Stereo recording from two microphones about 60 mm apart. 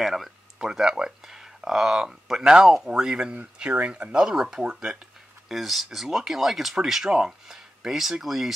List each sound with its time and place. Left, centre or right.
0.0 s speech: centre